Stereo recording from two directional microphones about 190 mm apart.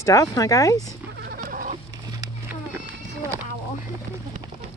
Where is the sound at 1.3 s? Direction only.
50° right (ahead or behind).